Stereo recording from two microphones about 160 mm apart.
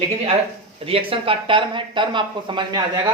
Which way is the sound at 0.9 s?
35° right (ahead or behind).